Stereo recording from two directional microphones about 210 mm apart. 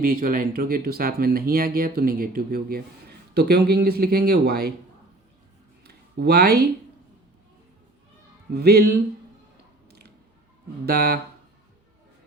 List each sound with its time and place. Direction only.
0.0 s speech: 40° right (ahead or behind)
5.8 s a sound: 50° right (ahead or behind)
8.5 s speech: 50° right (ahead or behind)
10.8 s speech: 50° right (ahead or behind)